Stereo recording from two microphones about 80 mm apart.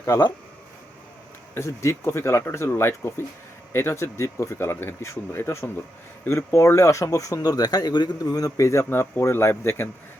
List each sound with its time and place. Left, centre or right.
0.0 s speech: left
1.5 s speech: left
8.2 s speech: left